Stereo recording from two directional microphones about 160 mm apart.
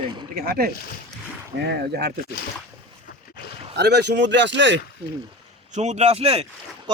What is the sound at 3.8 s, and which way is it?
Speech, 90° right.